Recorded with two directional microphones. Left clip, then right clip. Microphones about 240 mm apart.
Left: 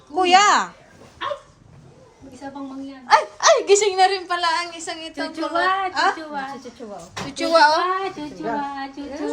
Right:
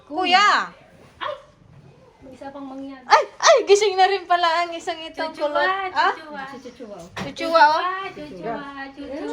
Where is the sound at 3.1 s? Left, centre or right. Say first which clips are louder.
Right 1 dB; centre.